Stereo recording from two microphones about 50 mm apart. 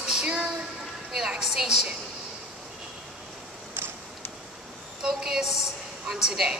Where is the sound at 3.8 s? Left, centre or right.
Right.